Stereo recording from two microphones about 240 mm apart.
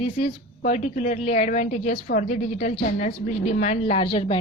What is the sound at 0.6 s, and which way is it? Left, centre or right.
A woman's voice, left.